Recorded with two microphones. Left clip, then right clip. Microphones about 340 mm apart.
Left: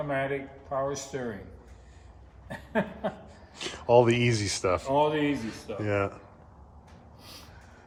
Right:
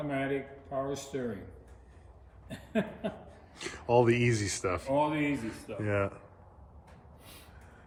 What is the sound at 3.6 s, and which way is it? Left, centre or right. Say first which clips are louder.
Speech: left 5 dB; centre.